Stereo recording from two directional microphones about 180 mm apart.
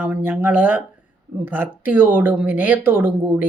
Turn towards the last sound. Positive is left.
turn(degrees=-10)  # may be behind; listen again after turning